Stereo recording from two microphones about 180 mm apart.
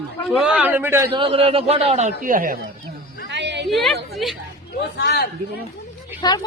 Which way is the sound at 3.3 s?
75° right (ahead or behind).